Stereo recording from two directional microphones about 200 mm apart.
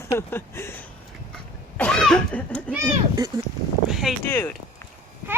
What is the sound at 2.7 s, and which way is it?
Speech, 15° right (ahead or behind).